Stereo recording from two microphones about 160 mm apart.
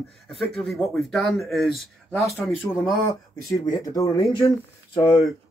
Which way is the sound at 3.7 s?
20° left (ahead or behind).